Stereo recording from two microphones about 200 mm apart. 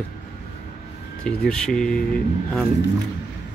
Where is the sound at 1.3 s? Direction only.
5° left (ahead or behind).